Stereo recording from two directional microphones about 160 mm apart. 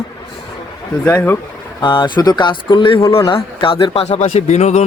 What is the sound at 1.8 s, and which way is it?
Speech, 30° left (ahead or behind).